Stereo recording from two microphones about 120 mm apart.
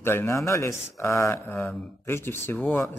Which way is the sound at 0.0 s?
20° left (ahead or behind).